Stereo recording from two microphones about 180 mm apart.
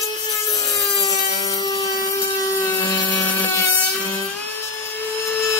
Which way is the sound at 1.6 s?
20° left (ahead or behind).